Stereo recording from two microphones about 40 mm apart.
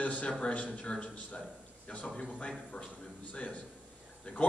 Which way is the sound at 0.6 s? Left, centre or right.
Centre.